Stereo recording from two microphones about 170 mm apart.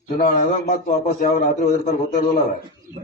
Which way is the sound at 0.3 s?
60° left (ahead or behind).